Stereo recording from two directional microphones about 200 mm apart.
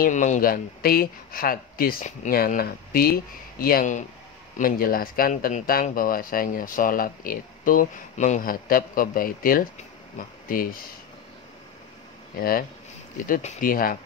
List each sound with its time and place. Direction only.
0.0 s speech: 40° left (ahead or behind)
12.4 s speech: 45° left (ahead or behind)